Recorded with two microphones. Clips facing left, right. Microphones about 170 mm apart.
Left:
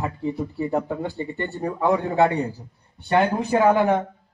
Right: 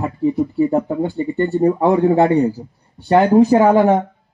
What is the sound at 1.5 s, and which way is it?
Speech, 35° right (ahead or behind).